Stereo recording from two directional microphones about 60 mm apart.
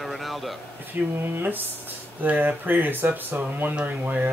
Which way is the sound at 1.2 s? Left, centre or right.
Right.